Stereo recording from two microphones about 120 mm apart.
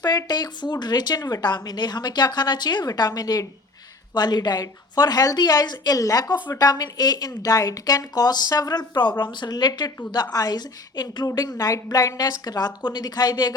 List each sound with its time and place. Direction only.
0.0 s a woman's voice: 35° left (ahead or behind)